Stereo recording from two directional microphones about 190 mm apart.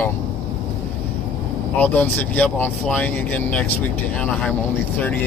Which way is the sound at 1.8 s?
10° left (ahead or behind).